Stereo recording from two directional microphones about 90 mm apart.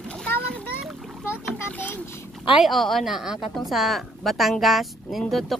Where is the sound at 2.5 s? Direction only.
Centre (ahead or behind).